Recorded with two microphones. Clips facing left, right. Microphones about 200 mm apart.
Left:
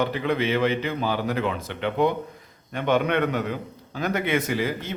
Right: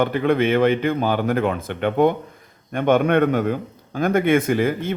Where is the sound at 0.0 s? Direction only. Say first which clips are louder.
Right 6 dB; 50° right (ahead or behind).